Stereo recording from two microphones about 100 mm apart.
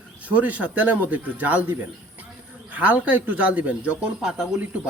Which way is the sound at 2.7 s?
15° right (ahead or behind).